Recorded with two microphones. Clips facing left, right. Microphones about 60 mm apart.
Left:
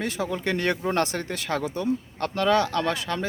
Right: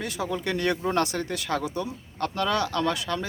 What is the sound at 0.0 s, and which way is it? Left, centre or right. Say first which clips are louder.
Speech: left 2 dB; left.